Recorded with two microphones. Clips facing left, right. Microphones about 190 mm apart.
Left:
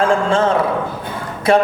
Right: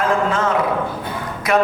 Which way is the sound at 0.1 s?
30° left (ahead or behind).